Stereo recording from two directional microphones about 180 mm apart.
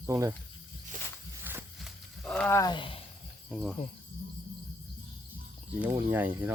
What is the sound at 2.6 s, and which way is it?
Speech, 25° left (ahead or behind).